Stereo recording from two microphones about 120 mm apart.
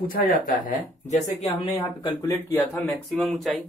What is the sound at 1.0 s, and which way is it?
Speech, 70° left (ahead or behind).